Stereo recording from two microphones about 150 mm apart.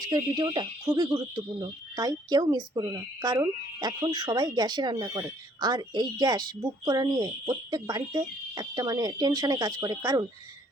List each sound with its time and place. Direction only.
0.1 s speech: 30° right (ahead or behind)